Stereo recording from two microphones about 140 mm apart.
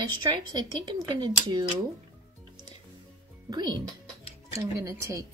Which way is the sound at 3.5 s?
30° right (ahead or behind).